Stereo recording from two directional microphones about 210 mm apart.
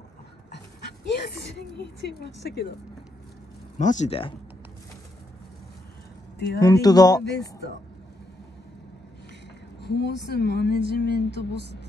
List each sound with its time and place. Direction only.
1.2 s a sound: 50° left (ahead or behind)
2.0 s a woman's voice: 50° left (ahead or behind)
3.7 s speech: 35° left (ahead or behind)
6.6 s speech: 15° left (ahead or behind)
7.2 s a woman's voice: 55° left (ahead or behind)
9.8 s a woman's voice: 55° left (ahead or behind)